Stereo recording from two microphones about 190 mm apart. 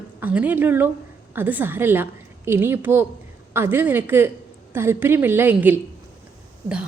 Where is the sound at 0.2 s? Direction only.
10° right (ahead or behind).